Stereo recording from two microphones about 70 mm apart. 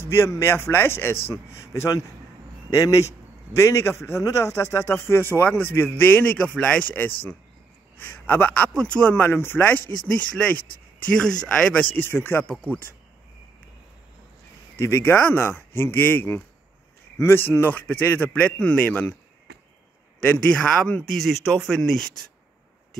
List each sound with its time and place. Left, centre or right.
0.0 s a man's voice: left; by 6.9 s centre
6.9 s speech: left
9.1 s speech: left
11.1 s speech: centre
11.8 s speech: left
14.8 s speech: left
20.5 s speech: centre